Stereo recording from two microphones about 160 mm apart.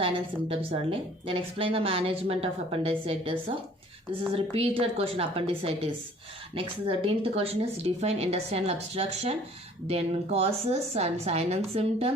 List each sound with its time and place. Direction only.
0.0 s a woman's voice: 35° right (ahead or behind)
4.4 s a woman's voice: 35° right (ahead or behind)